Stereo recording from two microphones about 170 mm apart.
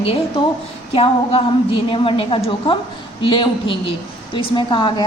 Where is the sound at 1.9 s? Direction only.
30° left (ahead or behind).